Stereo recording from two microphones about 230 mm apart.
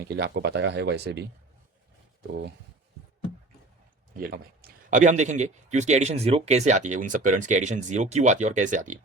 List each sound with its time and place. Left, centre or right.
0.0 s speech: right
4.2 s speech: right